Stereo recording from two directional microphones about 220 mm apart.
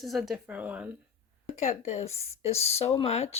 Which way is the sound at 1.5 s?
30° left (ahead or behind).